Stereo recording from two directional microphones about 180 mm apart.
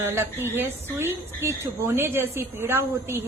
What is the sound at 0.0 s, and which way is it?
A woman's voice, 15° right (ahead or behind).